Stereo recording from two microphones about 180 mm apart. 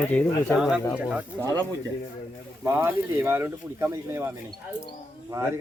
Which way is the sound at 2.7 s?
10° right (ahead or behind).